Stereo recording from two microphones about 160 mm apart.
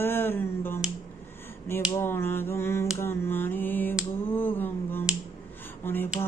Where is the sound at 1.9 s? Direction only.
15° left (ahead or behind).